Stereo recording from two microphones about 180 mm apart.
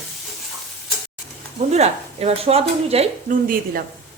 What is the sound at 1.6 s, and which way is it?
Speech, 35° right (ahead or behind).